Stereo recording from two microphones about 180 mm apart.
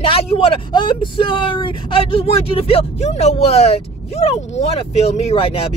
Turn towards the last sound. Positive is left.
turn(degrees=30)  # may be behind; listen again after turning